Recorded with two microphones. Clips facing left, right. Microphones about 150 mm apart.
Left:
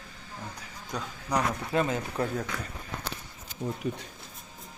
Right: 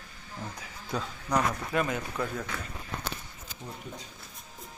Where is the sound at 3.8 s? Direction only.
80° left.